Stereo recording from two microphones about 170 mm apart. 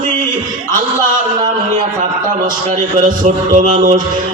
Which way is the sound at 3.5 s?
50° right (ahead or behind).